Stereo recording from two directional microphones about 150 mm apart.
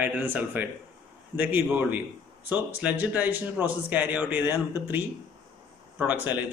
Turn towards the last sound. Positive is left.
turn(degrees=-10)  # may be behind; listen again after turning